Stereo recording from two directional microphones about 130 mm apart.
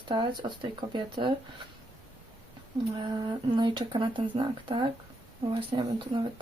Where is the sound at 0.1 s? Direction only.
35° right (ahead or behind).